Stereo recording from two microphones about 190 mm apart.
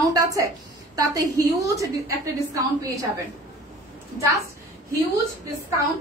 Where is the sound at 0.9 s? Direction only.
20° right (ahead or behind).